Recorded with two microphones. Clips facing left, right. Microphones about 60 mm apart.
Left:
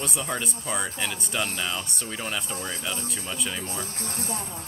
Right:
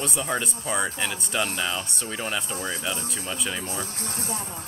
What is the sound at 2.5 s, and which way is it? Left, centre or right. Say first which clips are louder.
Speech: right 3 dB; right.